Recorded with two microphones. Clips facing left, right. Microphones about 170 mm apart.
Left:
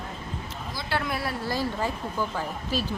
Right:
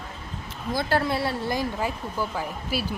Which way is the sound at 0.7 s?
50° right (ahead or behind).